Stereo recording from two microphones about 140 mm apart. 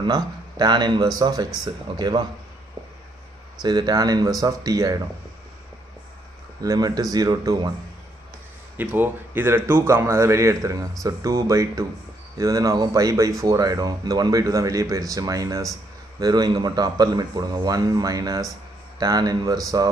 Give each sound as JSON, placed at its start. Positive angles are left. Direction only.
{"t": 0.0, "sound": "a man's voice", "side_deg": -30}
{"t": 3.6, "sound": "a man's voice", "side_deg": -30}
{"t": 6.6, "sound": "a man's voice", "side_deg": -25}
{"t": 8.7, "sound": "a man's voice", "side_deg": -15}